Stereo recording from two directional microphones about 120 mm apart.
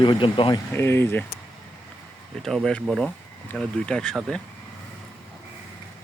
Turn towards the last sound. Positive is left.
turn(degrees=5)  # may be behind; listen again after turning